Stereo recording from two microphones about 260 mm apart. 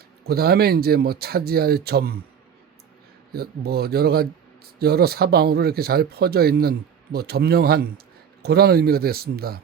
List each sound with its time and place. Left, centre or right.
0.3 s speech: right
3.3 s speech: right